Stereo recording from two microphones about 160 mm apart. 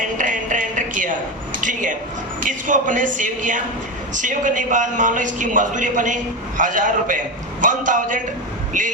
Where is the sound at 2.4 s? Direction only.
55° right (ahead or behind).